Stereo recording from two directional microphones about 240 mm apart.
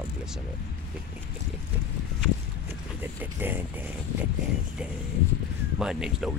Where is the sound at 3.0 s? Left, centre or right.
Centre.